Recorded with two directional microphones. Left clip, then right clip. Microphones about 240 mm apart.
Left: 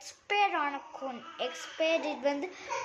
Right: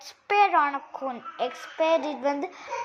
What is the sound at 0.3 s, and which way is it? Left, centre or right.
A child's voice, centre.